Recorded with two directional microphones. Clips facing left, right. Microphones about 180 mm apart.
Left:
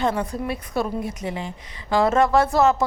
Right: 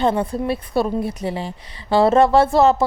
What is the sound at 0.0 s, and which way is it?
A woman's voice, 30° right (ahead or behind).